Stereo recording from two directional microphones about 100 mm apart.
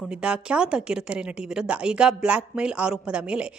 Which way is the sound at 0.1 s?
10° right (ahead or behind).